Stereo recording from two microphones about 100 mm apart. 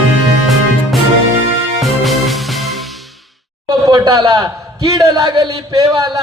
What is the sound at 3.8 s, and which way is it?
A man's voice, 40° right (ahead or behind).